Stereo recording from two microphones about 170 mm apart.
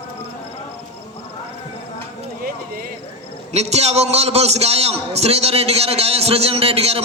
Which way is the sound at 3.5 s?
40° right (ahead or behind).